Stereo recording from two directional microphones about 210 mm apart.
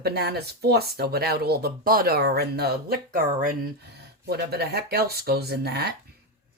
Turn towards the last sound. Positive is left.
turn(degrees=-50)  # may be behind; listen again after turning